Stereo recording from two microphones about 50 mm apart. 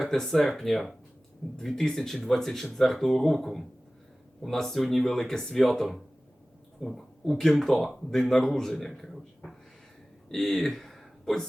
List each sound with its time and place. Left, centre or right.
0.0 s speech: centre
9.4 s speech: centre